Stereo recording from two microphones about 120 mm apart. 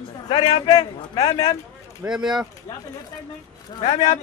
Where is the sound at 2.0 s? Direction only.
5° right (ahead or behind).